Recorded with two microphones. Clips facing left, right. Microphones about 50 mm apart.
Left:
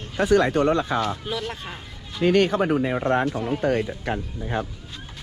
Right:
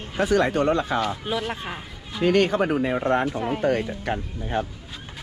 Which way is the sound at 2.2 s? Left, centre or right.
Right.